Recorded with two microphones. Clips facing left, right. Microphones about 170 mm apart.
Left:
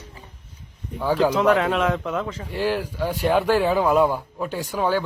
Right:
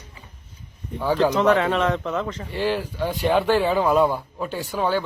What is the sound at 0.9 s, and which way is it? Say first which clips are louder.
A man's voice: even; 5° left (ahead or behind).